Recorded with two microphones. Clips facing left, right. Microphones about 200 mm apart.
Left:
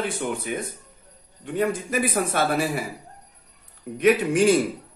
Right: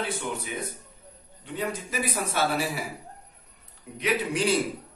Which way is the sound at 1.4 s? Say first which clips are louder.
Left 7 dB; 50° left (ahead or behind).